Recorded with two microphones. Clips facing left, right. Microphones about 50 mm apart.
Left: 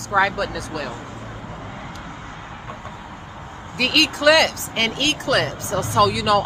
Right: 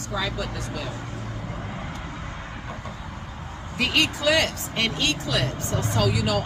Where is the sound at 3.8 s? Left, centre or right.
Left.